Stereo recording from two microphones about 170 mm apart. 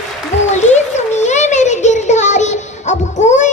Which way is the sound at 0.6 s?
45° left (ahead or behind).